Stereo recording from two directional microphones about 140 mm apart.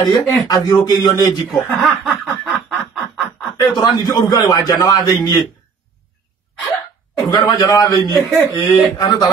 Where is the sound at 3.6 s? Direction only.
30° left (ahead or behind).